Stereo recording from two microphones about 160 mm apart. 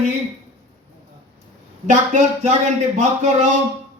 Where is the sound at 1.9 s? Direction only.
45° right (ahead or behind).